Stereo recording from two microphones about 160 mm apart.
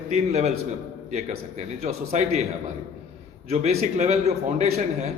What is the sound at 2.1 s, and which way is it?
Speech, 45° right (ahead or behind).